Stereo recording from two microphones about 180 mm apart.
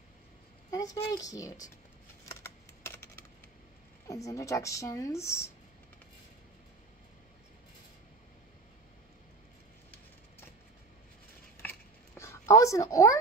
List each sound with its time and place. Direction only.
0.7 s speech: 20° left (ahead or behind)
2.8 s coin: 10° left (ahead or behind)
4.1 s a woman's voice: 20° left (ahead or behind)
12.2 s a woman's voice: 15° left (ahead or behind)